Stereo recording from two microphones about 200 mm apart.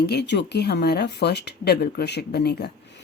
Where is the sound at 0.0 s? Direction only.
55° left (ahead or behind).